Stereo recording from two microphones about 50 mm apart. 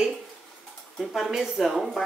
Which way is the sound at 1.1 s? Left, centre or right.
Centre.